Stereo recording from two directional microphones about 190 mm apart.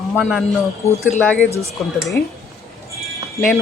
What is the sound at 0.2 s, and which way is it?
A man's voice, centre (ahead or behind).